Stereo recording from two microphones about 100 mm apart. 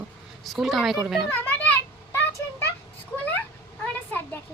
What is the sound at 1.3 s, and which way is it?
Children playing, 20° left (ahead or behind).